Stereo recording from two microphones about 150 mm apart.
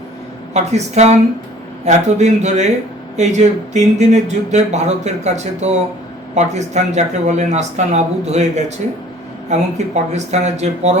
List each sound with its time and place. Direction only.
0.5 s speech: 50° right (ahead or behind)